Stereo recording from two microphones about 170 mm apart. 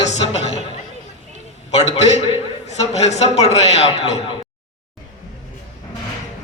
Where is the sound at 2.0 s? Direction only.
35° left (ahead or behind).